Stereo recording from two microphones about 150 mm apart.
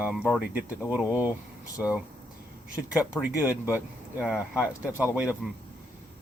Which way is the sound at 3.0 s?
10° right (ahead or behind).